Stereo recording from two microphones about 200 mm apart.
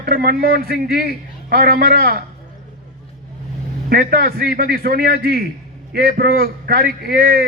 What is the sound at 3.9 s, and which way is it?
A man's voice, 50° right (ahead or behind).